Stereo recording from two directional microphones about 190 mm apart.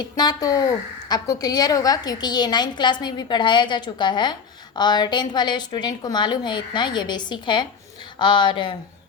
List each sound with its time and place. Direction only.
0.2 s a woman's voice: 20° left (ahead or behind)